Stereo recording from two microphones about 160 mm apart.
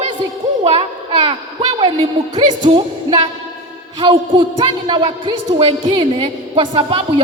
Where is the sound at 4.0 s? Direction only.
30° right (ahead or behind).